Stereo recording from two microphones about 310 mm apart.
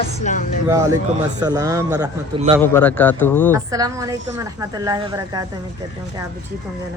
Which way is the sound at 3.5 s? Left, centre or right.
Centre.